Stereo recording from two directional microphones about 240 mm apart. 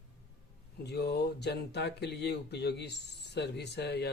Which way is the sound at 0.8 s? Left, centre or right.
Left.